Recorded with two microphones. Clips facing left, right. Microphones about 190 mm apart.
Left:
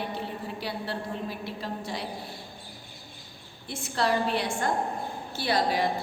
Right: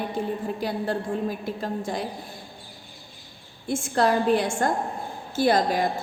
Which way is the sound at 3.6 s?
50° right (ahead or behind).